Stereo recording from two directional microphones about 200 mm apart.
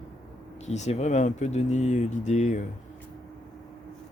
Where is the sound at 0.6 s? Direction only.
35° left (ahead or behind).